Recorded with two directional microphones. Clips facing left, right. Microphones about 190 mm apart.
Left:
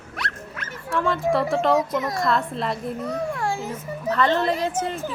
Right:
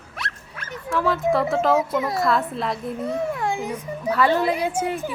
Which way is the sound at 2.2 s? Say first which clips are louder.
Right 1 dB; 5° right (ahead or behind).